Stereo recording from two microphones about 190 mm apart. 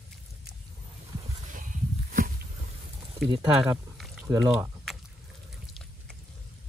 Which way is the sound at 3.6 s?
Centre (ahead or behind).